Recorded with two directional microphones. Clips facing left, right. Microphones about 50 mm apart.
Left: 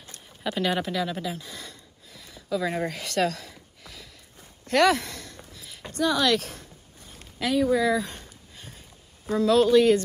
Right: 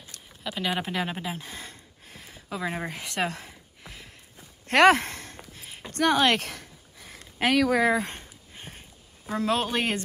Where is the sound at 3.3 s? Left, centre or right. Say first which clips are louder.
Left 3 dB; right.